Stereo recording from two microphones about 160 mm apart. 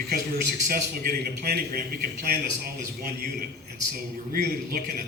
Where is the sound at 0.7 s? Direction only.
70° right (ahead or behind).